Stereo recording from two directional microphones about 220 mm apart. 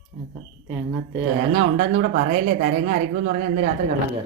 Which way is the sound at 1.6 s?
55° right (ahead or behind).